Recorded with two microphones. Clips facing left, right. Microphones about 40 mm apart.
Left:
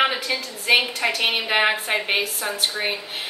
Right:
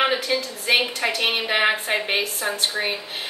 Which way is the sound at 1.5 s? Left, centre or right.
Centre.